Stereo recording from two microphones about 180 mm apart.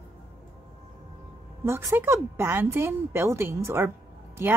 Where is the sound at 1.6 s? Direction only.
15° right (ahead or behind).